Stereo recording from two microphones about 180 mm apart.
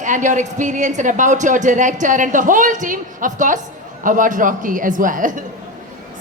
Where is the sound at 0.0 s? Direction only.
45° right (ahead or behind).